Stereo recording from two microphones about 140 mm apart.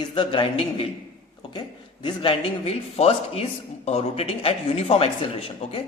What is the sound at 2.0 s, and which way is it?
Speech, 35° left (ahead or behind).